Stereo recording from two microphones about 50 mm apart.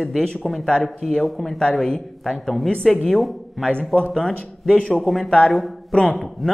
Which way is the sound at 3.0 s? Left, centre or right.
Centre.